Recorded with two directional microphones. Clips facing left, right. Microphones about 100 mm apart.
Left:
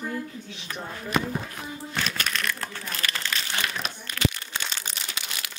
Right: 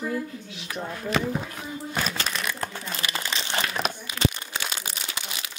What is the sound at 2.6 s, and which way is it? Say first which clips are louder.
Crumpling: right 1 dB; 20° right (ahead or behind).